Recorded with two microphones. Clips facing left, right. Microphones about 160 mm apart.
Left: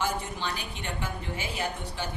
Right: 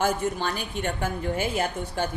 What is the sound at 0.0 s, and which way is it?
A woman's voice, 50° right (ahead or behind).